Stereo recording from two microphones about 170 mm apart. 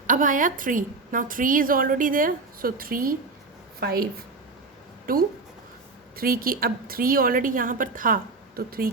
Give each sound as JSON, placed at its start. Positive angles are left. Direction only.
{"t": 0.1, "sound": "a woman's voice", "side_deg": -50}